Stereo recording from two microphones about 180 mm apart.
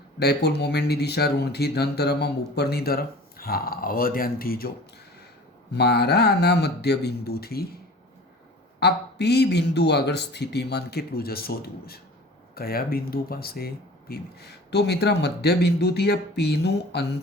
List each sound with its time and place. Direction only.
0.2 s speech: 65° left (ahead or behind)
5.7 s speech: 65° left (ahead or behind)
8.8 s speech: 65° left (ahead or behind)